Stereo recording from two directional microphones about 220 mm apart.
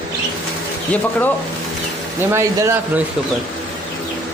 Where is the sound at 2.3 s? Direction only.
10° right (ahead or behind).